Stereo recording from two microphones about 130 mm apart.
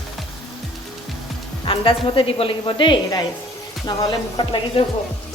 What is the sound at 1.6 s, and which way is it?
Speech, 40° left (ahead or behind).